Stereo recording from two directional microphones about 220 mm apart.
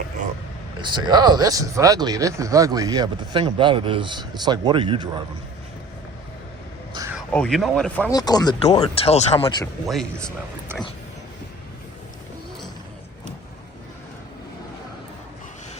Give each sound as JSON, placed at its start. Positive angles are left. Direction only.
{"t": 0.8, "sound": "speech", "side_deg": -20}
{"t": 6.9, "sound": "a sound", "side_deg": -15}
{"t": 7.2, "sound": "speech", "side_deg": 5}
{"t": 8.1, "sound": "speech", "side_deg": 15}
{"t": 9.8, "sound": "speech", "side_deg": 0}